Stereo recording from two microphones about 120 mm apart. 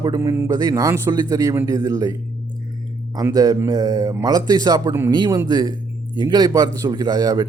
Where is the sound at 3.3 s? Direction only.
30° right (ahead or behind).